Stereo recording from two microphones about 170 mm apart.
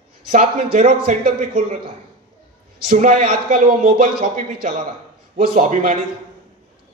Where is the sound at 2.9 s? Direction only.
50° right (ahead or behind).